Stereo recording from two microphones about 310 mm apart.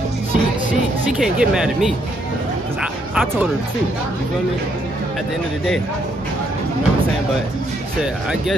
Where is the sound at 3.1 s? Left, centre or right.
Centre.